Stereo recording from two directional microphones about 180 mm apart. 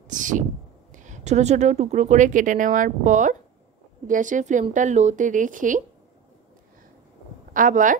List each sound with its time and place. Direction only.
0.1 s speech: 45° right (ahead or behind)
7.5 s speech: 45° right (ahead or behind)